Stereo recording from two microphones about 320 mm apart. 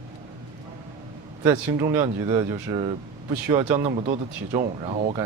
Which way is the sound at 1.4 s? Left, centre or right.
Centre.